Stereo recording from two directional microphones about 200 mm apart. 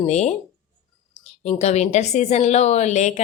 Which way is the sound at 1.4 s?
35° left (ahead or behind).